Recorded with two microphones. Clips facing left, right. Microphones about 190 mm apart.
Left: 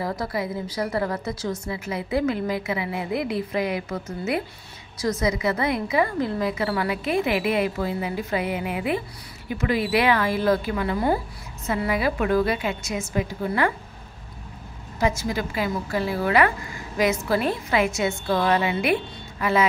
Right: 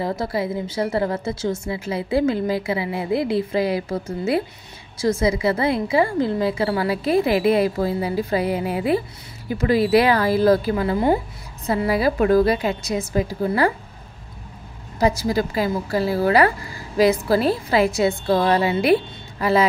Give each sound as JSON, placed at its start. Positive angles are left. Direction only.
{"t": 0.0, "sound": "a woman's voice", "side_deg": -25}
{"t": 15.0, "sound": "a woman's voice", "side_deg": -35}